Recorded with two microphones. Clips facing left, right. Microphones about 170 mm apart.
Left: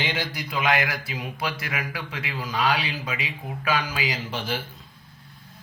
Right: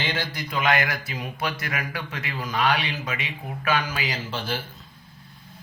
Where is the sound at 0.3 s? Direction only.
10° left (ahead or behind).